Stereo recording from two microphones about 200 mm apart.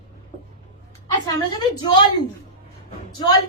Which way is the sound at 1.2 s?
20° left (ahead or behind).